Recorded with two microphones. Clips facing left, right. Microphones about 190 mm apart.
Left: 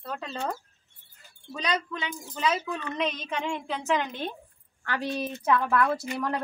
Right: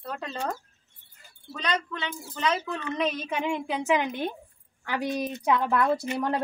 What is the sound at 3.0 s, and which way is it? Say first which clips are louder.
A woman's voice: right 3 dB; 5° right (ahead or behind).